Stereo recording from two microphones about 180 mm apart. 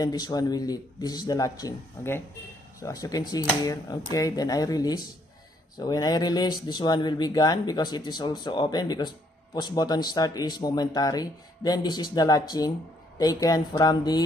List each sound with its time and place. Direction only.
0.0 s speech: 20° left (ahead or behind)